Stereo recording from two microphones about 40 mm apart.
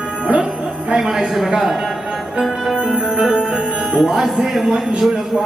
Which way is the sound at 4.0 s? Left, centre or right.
Centre.